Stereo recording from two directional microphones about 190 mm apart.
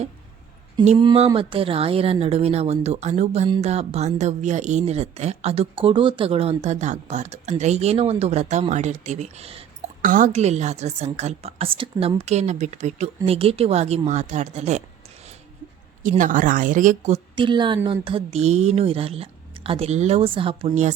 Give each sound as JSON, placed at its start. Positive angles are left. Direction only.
{"t": 0.9, "sound": "a woman's voice", "side_deg": -30}
{"t": 10.0, "sound": "a woman's voice", "side_deg": -45}
{"t": 16.0, "sound": "a woman's voice", "side_deg": -45}